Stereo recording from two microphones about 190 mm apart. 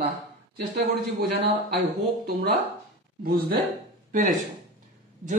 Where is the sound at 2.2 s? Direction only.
50° right (ahead or behind).